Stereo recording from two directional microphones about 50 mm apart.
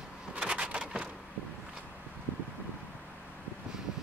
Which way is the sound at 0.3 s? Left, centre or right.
Right.